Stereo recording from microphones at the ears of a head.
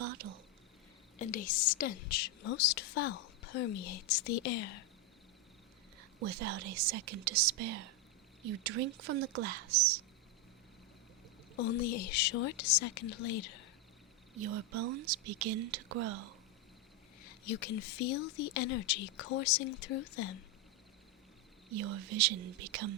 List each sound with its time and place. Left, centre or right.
0.0 s a sound: right
1.2 s a woman's voice: left
6.0 s speech: right
11.5 s a woman's voice: left
14.3 s speech: right
17.2 s a woman's voice: left
21.7 s speech: right